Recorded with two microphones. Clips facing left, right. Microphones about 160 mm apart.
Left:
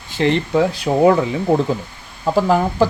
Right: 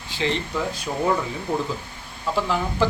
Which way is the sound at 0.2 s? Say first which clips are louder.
Left 9 dB; 70° left (ahead or behind).